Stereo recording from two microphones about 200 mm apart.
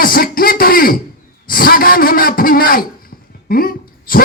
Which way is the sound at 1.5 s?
45° left (ahead or behind).